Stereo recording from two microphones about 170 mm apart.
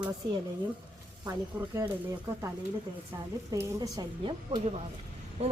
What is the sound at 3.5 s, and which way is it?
Speech, 20° right (ahead or behind).